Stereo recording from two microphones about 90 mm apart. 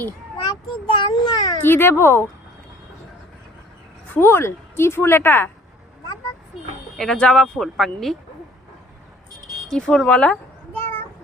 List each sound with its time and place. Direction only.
0.4 s a child's voice: 60° left (ahead or behind)
1.6 s a woman's voice: 25° left (ahead or behind)
4.1 s a woman's voice: 25° left (ahead or behind)
6.9 s speech: 5° left (ahead or behind)
9.6 s speech: 5° left (ahead or behind)